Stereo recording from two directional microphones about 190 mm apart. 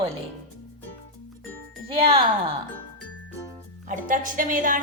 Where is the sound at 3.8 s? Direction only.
45° right (ahead or behind).